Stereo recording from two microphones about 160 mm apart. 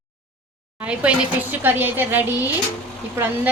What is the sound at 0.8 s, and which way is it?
A woman's voice, 10° right (ahead or behind).